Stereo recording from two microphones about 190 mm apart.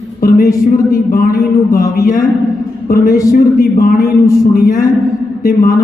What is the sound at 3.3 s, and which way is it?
Speech, 50° left (ahead or behind).